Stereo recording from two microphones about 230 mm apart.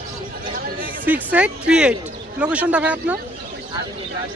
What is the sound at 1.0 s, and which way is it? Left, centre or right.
Speech, centre.